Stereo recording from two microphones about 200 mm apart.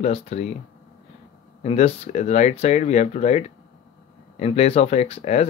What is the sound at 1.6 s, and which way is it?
Speech, 30° left (ahead or behind).